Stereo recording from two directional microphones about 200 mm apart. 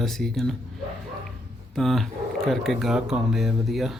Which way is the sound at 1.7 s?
Centre (ahead or behind).